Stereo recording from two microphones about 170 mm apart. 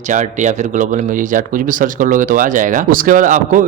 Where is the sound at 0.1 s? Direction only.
45° right (ahead or behind).